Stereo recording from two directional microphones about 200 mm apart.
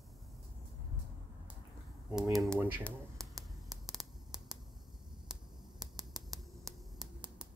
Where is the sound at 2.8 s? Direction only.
Centre (ahead or behind).